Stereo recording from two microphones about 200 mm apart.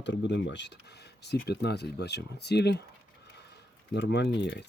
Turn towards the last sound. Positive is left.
turn(degrees=60)  # may be behind; listen again after turning